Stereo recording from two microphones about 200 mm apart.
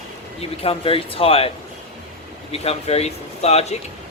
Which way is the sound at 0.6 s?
25° left (ahead or behind).